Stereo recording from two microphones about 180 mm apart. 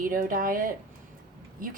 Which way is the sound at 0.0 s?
50° right (ahead or behind).